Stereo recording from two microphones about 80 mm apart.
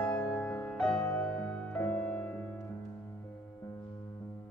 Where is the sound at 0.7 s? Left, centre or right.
Centre.